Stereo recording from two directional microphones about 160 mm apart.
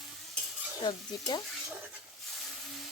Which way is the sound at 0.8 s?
25° left (ahead or behind).